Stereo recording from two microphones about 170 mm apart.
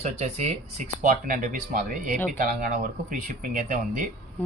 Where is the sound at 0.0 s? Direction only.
40° right (ahead or behind).